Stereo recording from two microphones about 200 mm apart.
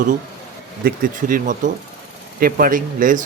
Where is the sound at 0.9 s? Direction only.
40° right (ahead or behind).